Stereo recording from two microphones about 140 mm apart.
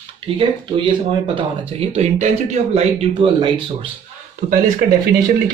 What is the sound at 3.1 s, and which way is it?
Speech, 35° right (ahead or behind).